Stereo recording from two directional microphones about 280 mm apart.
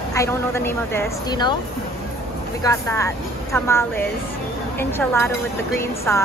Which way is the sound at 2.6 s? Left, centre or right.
Centre.